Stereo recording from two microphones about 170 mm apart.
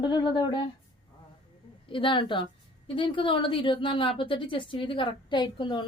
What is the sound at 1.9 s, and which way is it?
A woman's voice, 30° left (ahead or behind).